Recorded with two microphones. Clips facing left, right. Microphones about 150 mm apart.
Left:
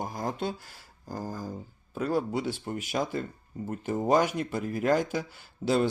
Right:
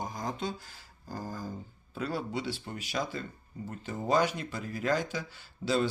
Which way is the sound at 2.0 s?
50° left (ahead or behind).